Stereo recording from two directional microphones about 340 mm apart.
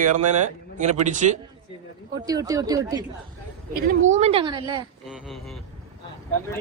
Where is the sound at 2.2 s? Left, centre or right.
Centre.